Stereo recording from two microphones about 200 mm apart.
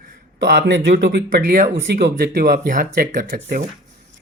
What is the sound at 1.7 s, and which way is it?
Speech, 65° right (ahead or behind).